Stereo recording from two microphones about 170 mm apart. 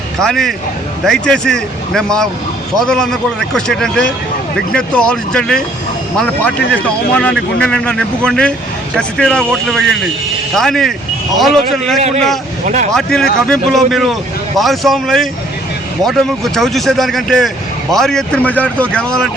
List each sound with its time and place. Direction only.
0.2 s speech: 5° left (ahead or behind)
11.9 s speech: 40° right (ahead or behind)
12.9 s speech: 5° left (ahead or behind)